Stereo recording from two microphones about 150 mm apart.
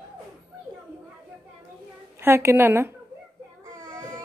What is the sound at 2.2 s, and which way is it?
Speech, 15° right (ahead or behind).